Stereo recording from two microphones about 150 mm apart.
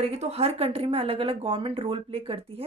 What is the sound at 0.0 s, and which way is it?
Speech, 45° right (ahead or behind).